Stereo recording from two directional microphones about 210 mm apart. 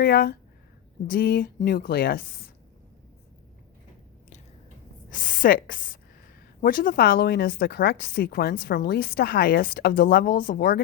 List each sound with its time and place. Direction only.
0.0 s speech: 45° left (ahead or behind)
5.1 s speech: 40° left (ahead or behind)